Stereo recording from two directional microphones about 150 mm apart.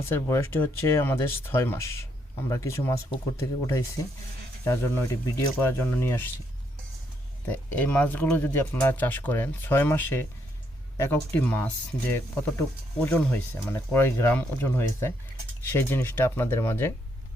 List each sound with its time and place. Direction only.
0.1 s speech: 20° left (ahead or behind)
4.6 s speech: 20° left (ahead or behind)
7.4 s speech: 10° left (ahead or behind)